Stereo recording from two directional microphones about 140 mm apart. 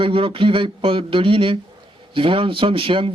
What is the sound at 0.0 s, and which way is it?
Speech, 40° right (ahead or behind).